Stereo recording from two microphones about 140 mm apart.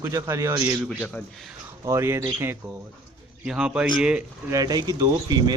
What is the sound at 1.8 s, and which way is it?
Speech, 20° right (ahead or behind).